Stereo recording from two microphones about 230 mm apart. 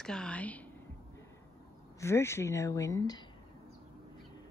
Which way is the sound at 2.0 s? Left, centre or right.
Centre.